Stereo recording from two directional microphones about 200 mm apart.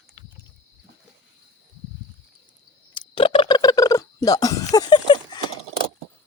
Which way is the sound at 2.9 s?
25° left (ahead or behind).